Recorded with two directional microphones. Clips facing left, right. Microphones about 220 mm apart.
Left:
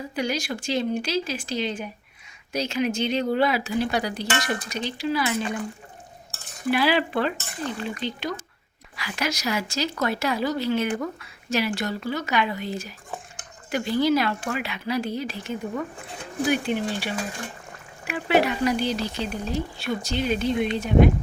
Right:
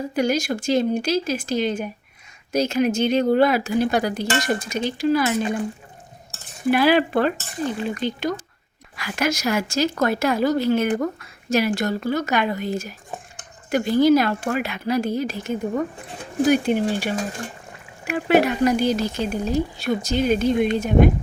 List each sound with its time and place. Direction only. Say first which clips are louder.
0.2 s speech: right 6 dB; 45° right (ahead or behind)
6.7 s speech: right 5 dB; 50° right (ahead or behind)